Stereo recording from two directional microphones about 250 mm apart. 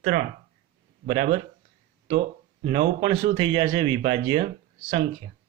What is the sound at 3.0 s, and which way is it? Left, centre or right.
Speech, right.